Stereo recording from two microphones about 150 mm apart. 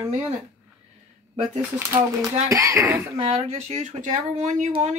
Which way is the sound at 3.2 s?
45° right (ahead or behind).